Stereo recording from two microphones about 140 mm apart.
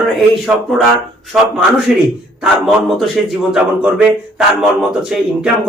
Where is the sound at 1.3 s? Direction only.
5° right (ahead or behind).